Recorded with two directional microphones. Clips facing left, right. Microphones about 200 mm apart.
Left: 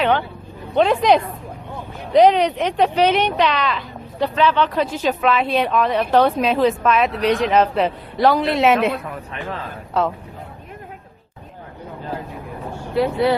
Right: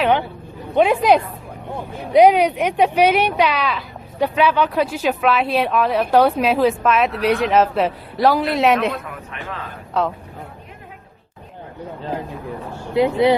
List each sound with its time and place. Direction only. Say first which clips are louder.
0.0 s a sound: right 1 dB; 15° right (ahead or behind)
0.8 s speech: right 1 dB; 5° right (ahead or behind)
9.3 s a man's voice: left 2 dB; 35° left (ahead or behind)
10.0 s speech: left 1 dB; centre (ahead or behind)
12.9 s speech: right 3 dB; 20° right (ahead or behind)